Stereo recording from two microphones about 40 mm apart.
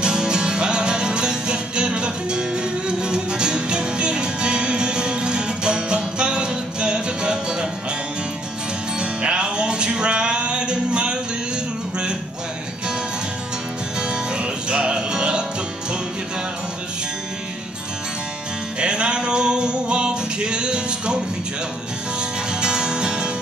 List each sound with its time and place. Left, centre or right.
0.0 s music: centre
9.0 s music: right
13.9 s music: right
18.8 s music: right
22.5 s music: centre